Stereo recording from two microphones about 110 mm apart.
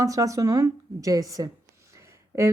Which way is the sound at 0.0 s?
30° right (ahead or behind).